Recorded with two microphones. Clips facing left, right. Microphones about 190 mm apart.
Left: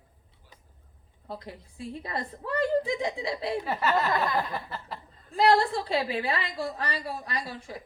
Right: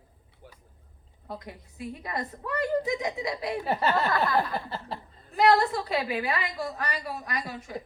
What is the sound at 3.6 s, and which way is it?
Speech, 30° right (ahead or behind).